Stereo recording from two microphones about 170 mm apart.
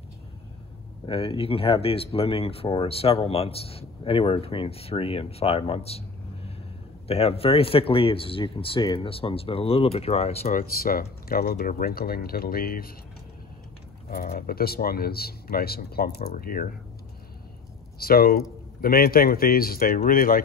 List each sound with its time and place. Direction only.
1.0 s speech: 30° left (ahead or behind)
10.5 s speech: 60° left (ahead or behind)
14.1 s speech: 60° left (ahead or behind)
17.9 s speech: 60° left (ahead or behind)